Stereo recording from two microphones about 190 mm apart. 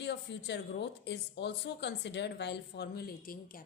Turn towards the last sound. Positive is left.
turn(degrees=50)  # may be behind; listen again after turning